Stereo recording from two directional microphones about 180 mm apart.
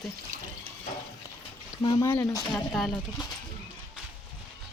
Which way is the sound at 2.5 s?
Centre (ahead or behind).